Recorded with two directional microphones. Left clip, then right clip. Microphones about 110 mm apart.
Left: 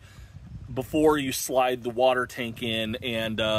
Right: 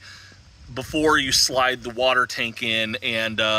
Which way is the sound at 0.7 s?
35° left (ahead or behind).